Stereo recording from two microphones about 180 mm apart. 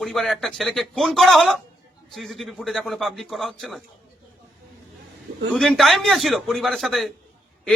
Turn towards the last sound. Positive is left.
turn(degrees=0)  # may be behind; listen again after turning